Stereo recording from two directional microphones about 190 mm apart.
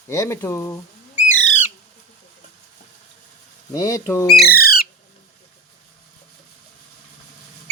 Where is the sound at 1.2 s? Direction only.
40° left (ahead or behind).